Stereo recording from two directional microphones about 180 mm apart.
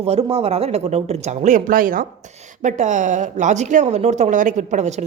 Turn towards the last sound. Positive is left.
turn(degrees=-40)  # may be behind; listen again after turning